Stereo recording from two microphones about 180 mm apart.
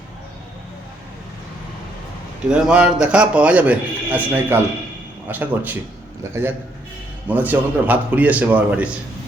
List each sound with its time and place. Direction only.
2.5 s a man's voice: 5° right (ahead or behind)